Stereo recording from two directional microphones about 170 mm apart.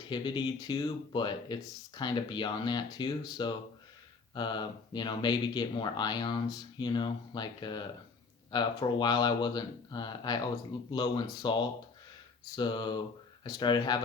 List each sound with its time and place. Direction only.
0.1 s speech: 25° left (ahead or behind)